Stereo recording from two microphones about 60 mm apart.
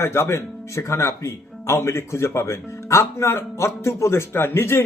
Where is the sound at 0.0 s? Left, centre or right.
Left.